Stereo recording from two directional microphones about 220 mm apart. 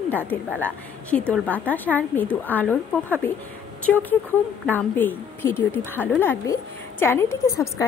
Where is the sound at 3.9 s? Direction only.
5° left (ahead or behind).